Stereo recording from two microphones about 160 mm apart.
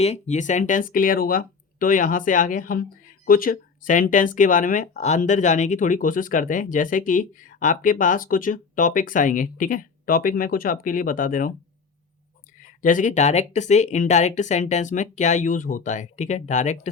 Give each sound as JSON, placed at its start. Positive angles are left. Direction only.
{"t": 0.0, "sound": "speech", "side_deg": 45}
{"t": 12.8, "sound": "speech", "side_deg": 55}